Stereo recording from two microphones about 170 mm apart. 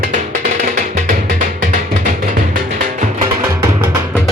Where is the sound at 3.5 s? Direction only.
20° right (ahead or behind).